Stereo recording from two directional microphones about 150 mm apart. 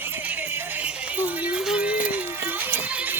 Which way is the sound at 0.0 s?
10° right (ahead or behind).